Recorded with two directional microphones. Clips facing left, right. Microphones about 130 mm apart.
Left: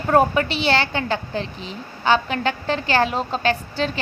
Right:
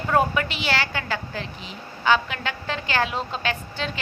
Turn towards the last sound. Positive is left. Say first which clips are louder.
# left 6 dB
turn(degrees=35)  # may be behind; listen again after turning